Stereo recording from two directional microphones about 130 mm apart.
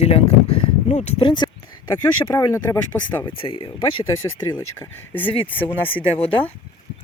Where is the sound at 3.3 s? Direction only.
40° left (ahead or behind).